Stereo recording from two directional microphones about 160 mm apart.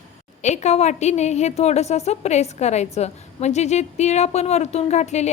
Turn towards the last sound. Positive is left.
turn(degrees=45)  # may be behind; listen again after turning